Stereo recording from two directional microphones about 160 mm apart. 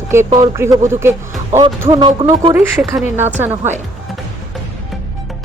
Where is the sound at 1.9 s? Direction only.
30° right (ahead or behind).